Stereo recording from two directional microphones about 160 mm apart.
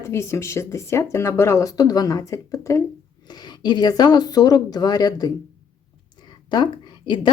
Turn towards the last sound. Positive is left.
turn(degrees=30)  # may be behind; listen again after turning